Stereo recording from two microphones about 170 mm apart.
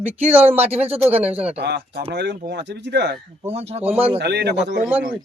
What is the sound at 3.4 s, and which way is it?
Speech, 40° right (ahead or behind).